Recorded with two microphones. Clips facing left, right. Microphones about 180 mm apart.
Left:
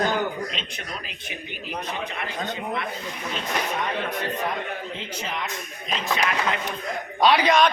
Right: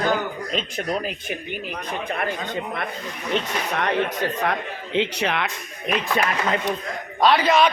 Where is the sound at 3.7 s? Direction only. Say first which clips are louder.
Right 4 dB; 80° right.